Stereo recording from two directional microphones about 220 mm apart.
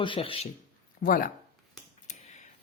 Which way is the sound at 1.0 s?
40° left (ahead or behind).